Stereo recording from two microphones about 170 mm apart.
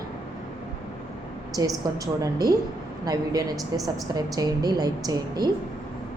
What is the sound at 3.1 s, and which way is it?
A woman's voice, 20° right (ahead or behind).